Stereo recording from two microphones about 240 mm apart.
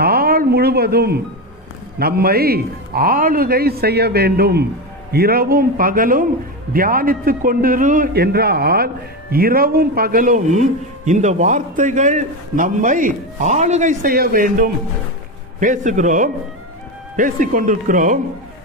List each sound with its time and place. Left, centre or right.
0.0 s music: right
2.0 s a man's voice: right